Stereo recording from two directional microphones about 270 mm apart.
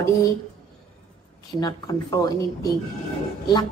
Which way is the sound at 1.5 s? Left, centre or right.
Centre.